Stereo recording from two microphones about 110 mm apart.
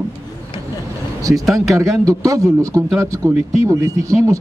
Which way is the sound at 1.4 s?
Centre (ahead or behind).